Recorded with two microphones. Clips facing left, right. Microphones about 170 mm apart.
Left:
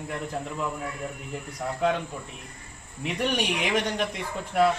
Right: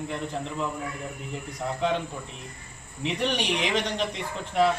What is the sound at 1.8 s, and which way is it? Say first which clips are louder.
Speech: left 1 dB; 5° left (ahead or behind).